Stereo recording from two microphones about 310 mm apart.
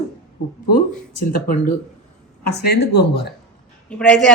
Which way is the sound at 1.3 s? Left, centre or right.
Left.